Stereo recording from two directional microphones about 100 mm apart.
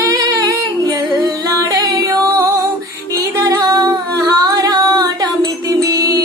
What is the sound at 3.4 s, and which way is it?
Music, 35° right (ahead or behind).